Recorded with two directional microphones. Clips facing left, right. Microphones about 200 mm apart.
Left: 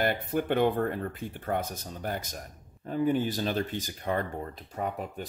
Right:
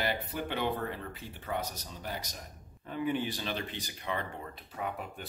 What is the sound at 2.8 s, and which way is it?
Speech, 40° left (ahead or behind).